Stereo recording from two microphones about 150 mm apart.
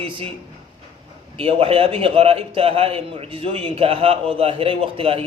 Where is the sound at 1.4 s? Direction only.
35° right (ahead or behind).